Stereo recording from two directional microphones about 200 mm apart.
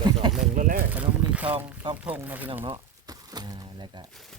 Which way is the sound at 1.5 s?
25° right (ahead or behind).